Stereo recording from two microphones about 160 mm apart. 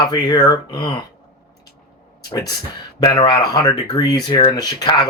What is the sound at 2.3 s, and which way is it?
Speech, 20° left (ahead or behind).